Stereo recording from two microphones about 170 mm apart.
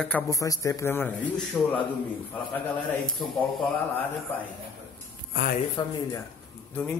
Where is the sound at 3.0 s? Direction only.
Centre (ahead or behind).